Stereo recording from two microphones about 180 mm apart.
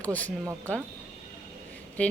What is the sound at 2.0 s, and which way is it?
Speech, 10° left (ahead or behind).